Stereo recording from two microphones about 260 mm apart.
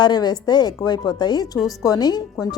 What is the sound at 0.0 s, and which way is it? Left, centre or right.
A woman's voice, centre.